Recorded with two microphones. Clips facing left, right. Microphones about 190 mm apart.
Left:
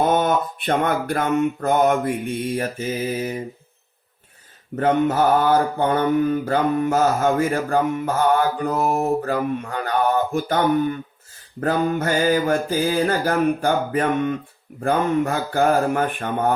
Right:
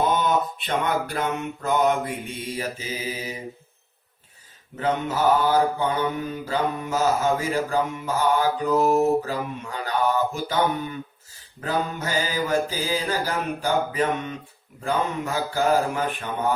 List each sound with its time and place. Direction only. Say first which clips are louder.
0.0 s mantra: left 3 dB; 50° left (ahead or behind)
4.8 s mantra: left 5 dB; 55° left (ahead or behind)